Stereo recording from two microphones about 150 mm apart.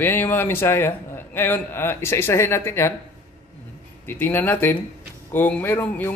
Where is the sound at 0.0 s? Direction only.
15° left (ahead or behind).